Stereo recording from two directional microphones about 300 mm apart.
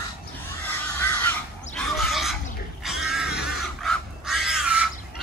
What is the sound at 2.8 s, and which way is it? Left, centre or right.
Pig, centre.